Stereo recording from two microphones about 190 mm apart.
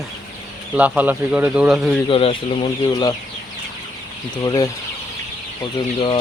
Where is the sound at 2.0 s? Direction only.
30° left (ahead or behind).